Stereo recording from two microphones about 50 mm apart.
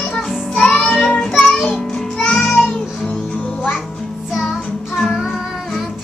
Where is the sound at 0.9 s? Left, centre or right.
Centre.